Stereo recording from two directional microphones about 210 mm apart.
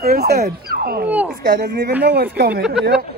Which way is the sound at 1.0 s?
10° right (ahead or behind).